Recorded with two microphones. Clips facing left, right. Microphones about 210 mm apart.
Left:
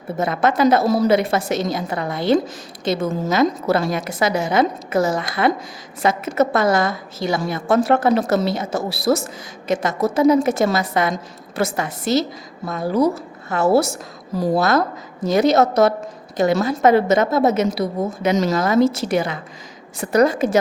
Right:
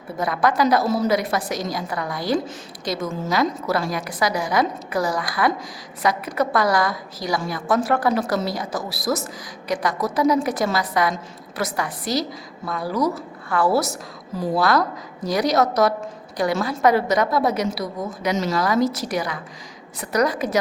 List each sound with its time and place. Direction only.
0.2 s a woman's voice: 25° left (ahead or behind)
0.9 s a woman's voice: 35° left (ahead or behind)
1.1 s a woman's voice: 25° left (ahead or behind)